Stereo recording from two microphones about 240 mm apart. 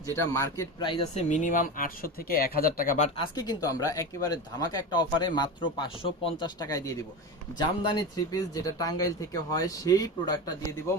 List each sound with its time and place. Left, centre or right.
0.2 s speech: centre; by 3.1 s left
3.2 s speech: centre